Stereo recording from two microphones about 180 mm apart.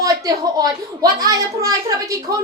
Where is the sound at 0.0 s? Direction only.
20° right (ahead or behind).